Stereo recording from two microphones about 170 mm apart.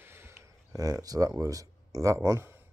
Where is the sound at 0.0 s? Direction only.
15° right (ahead or behind).